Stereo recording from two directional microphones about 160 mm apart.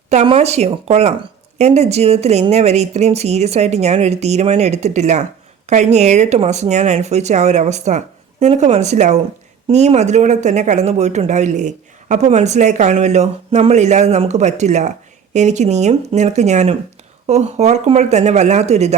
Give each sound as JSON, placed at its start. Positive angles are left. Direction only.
{"t": 0.1, "sound": "speech", "side_deg": -45}